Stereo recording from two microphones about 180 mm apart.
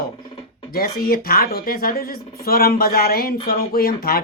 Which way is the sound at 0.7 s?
55° left (ahead or behind).